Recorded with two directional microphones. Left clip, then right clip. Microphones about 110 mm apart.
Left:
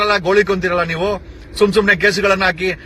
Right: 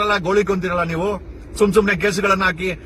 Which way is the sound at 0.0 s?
30° right (ahead or behind).